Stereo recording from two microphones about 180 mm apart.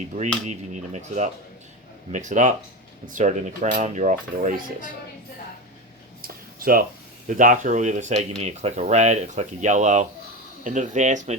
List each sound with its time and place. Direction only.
0.2 s speech: 40° right (ahead or behind)
2.1 s cutlery: 45° right (ahead or behind)
6.2 s a sound: 55° right (ahead or behind)
7.3 s cutlery: 45° right (ahead or behind)
8.4 s speech: 40° right (ahead or behind)
10.6 s cutlery: 45° right (ahead or behind)